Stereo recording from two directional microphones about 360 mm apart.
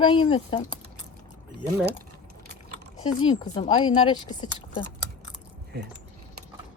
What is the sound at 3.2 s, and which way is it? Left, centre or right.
Speech, centre.